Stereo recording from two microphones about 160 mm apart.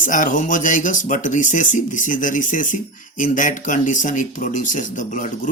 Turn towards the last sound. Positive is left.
turn(degrees=55)  # may be behind; listen again after turning